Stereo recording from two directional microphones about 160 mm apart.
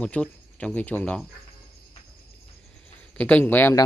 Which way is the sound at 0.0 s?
5° left (ahead or behind).